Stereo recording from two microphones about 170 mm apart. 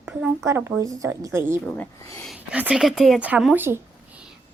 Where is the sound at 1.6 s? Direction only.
10° left (ahead or behind).